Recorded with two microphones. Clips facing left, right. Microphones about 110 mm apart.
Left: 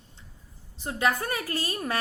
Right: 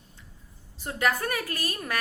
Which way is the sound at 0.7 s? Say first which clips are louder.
Left 1 dB; 20° left (ahead or behind).